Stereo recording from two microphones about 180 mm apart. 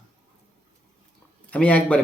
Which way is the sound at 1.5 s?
5° left (ahead or behind).